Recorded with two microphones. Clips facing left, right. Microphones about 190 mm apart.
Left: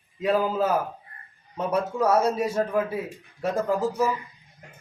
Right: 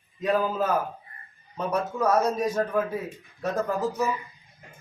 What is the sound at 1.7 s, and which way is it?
Speech, 10° left (ahead or behind).